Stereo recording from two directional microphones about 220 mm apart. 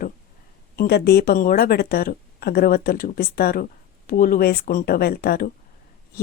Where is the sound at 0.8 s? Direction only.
45° left (ahead or behind).